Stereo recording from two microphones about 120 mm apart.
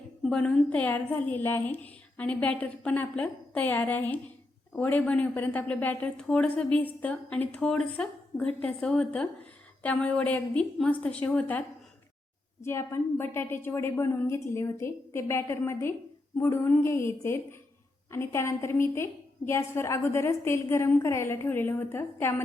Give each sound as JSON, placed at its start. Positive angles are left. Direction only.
{"t": 0.2, "sound": "a woman's voice", "side_deg": 5}
{"t": 12.6, "sound": "a woman's voice", "side_deg": 20}